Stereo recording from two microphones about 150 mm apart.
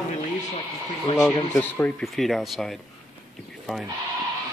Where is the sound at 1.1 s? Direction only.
25° left (ahead or behind).